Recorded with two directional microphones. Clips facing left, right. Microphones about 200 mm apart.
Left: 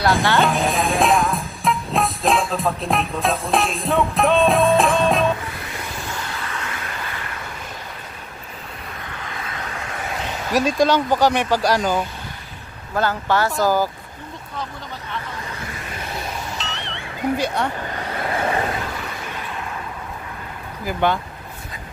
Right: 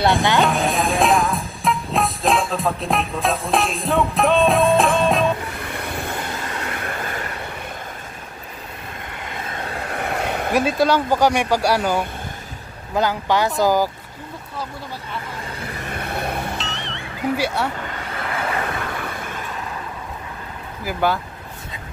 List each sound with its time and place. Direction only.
0.4 s music: centre (ahead or behind)
5.6 s vehicle: 60° right (ahead or behind)
6.4 s vehicle: 50° right (ahead or behind)
9.6 s train: 35° right (ahead or behind)
9.8 s vehicle: 55° right (ahead or behind)
10.5 s speech: 10° right (ahead or behind)
15.9 s vehicle: 60° right (ahead or behind)
16.5 s music: centre (ahead or behind)
18.1 s vehicle: 30° left (ahead or behind)
20.8 s speech: 5° right (ahead or behind)